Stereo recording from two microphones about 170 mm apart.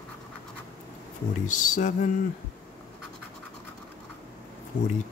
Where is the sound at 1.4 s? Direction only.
50° left (ahead or behind).